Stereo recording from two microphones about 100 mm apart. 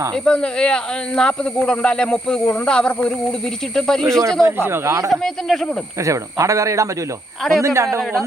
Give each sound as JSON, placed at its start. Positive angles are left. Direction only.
{"t": 0.1, "sound": "speech", "side_deg": 10}
{"t": 4.4, "sound": "speech", "side_deg": -25}
{"t": 5.1, "sound": "speech", "side_deg": 5}
{"t": 6.0, "sound": "a man's voice", "side_deg": -30}